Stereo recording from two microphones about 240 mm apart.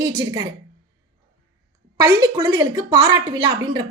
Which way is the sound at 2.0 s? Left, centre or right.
Centre.